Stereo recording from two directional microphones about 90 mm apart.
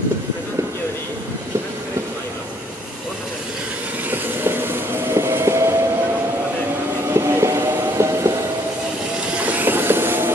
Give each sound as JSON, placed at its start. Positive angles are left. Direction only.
{"t": 4.1, "sound": "train", "side_deg": -25}
{"t": 7.2, "sound": "train", "side_deg": -30}
{"t": 9.5, "sound": "train", "side_deg": -20}